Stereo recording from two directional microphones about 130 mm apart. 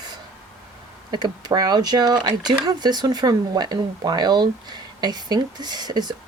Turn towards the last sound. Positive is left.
turn(degrees=-35)  # may be behind; listen again after turning